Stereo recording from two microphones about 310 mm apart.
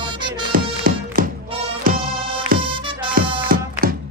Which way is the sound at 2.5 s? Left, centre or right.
Right.